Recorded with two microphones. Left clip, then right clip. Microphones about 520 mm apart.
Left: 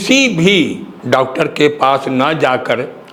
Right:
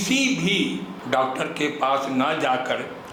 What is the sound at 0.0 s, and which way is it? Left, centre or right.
A man's voice, left.